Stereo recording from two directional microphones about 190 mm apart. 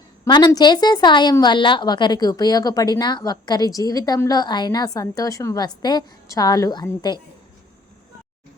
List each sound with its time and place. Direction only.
0.3 s a woman's voice: 25° left (ahead or behind)